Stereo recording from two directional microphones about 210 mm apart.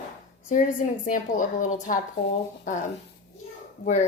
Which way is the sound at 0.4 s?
35° left (ahead or behind).